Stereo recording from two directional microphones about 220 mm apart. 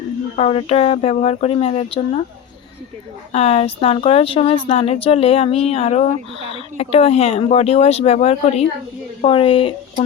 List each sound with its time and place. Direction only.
0.3 s speech: 25° left (ahead or behind)
3.3 s speech: 30° left (ahead or behind)